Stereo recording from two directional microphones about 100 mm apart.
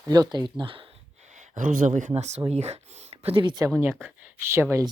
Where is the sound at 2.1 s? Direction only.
90° right.